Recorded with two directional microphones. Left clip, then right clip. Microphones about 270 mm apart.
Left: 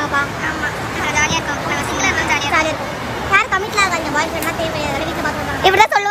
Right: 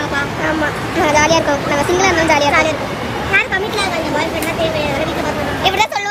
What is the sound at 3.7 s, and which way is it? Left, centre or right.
Vehicle, centre.